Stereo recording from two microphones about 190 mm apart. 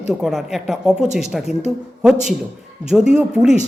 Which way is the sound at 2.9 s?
5° right (ahead or behind).